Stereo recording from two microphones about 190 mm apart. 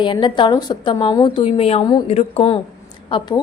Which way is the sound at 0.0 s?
25° left (ahead or behind).